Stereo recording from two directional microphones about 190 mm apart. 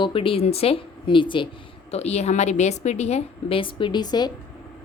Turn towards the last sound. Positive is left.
turn(degrees=20)  # may be behind; listen again after turning